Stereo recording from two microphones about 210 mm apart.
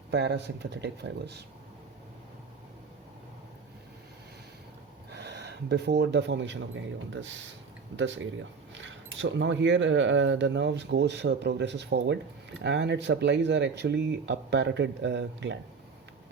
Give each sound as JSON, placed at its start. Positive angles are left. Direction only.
{"t": 0.1, "sound": "speech", "side_deg": -55}
{"t": 5.1, "sound": "speech", "side_deg": -55}